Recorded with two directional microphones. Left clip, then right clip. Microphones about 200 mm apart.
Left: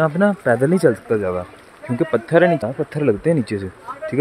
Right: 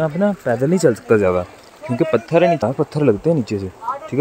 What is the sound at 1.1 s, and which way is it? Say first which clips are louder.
Speech: right 5 dB; 15° right (ahead or behind).